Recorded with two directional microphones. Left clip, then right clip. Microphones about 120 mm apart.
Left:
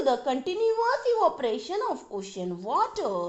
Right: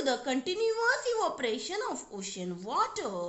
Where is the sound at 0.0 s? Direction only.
25° left (ahead or behind).